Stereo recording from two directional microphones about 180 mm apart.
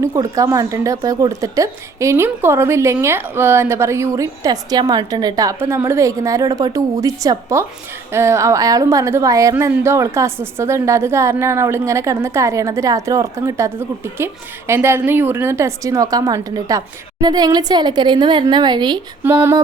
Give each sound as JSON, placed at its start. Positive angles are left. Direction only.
{"t": 0.0, "sound": "a woman's voice", "side_deg": -15}
{"t": 19.2, "sound": "a woman's voice", "side_deg": -10}